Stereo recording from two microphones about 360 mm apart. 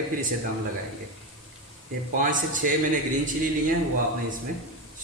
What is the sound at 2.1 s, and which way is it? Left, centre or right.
Speech, right.